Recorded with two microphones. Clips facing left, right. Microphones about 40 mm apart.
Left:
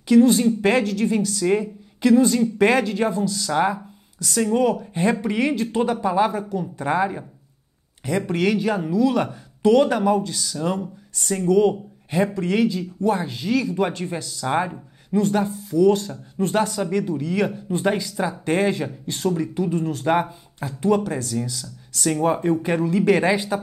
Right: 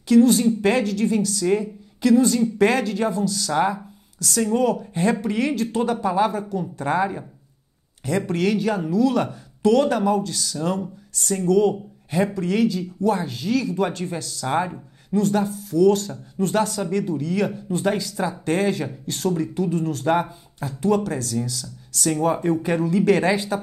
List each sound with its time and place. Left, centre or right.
0.0 s speech: left
3.5 s speech: centre
8.3 s speech: left
14.4 s speech: centre
15.1 s speech: left
18.1 s speech: centre
18.4 s speech: left